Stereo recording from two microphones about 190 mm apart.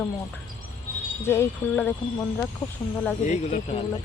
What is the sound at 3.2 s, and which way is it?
Speech, 40° left (ahead or behind).